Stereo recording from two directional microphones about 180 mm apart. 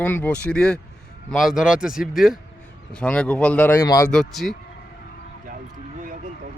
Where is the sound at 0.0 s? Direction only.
10° left (ahead or behind).